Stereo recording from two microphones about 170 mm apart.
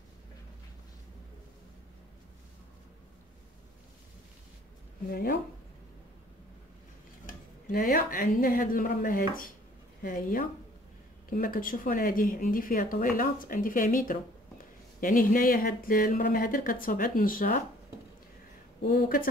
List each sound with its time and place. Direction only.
5.1 s speech: 60° left (ahead or behind)
7.2 s speech: 55° left (ahead or behind)
18.8 s speech: 60° left (ahead or behind)